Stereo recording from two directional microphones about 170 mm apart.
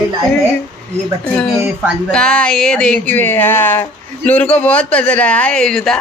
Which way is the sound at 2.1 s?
5° left (ahead or behind).